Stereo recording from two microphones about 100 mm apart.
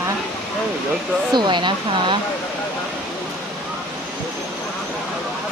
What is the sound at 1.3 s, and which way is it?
Speech, 50° right (ahead or behind).